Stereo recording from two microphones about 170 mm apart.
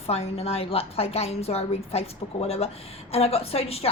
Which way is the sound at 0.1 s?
35° left (ahead or behind).